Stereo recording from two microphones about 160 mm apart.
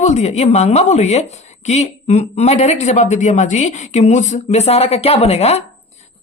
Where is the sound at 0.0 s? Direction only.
45° left (ahead or behind).